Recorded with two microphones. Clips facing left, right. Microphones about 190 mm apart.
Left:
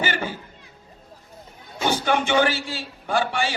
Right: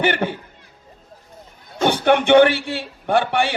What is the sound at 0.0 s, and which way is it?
Speech, 60° right (ahead or behind).